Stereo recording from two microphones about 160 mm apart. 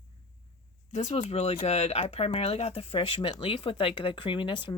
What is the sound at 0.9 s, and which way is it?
Speech, 45° left (ahead or behind).